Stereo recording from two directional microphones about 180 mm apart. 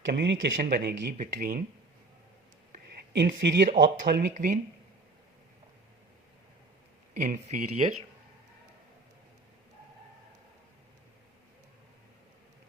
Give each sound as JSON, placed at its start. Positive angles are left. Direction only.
{"t": 0.1, "sound": "speech", "side_deg": -70}
{"t": 0.5, "sound": "speech", "side_deg": -60}
{"t": 1.2, "sound": "speech", "side_deg": -50}
{"t": 2.7, "sound": "speech", "side_deg": -55}
{"t": 4.4, "sound": "speech", "side_deg": -40}
{"t": 7.2, "sound": "speech", "side_deg": -40}